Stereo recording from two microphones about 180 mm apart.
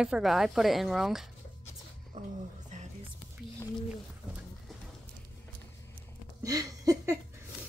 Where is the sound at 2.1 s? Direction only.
40° right (ahead or behind).